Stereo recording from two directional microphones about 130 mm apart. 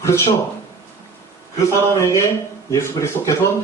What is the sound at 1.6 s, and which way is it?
Speech, 20° left (ahead or behind).